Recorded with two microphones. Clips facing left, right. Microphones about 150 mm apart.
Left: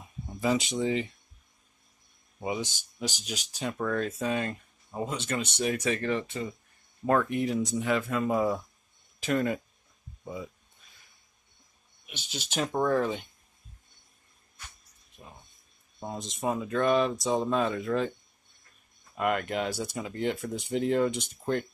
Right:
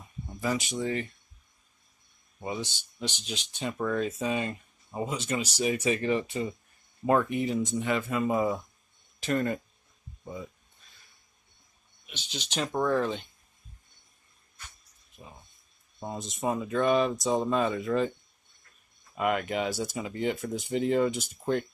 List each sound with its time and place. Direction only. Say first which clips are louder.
0.4 s speech: left 3 dB; 20° left (ahead or behind)
2.4 s speech: left 2 dB; 15° left (ahead or behind)
12.1 s speech: even; 10° left (ahead or behind)
15.2 s speech: right 1 dB; centre (ahead or behind)
19.1 s speech: even; centre (ahead or behind)